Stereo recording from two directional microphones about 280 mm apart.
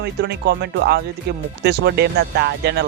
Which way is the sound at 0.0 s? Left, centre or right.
Right.